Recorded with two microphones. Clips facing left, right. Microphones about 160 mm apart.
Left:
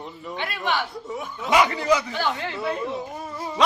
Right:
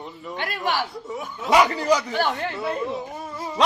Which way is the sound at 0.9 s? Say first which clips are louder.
Even; centre (ahead or behind).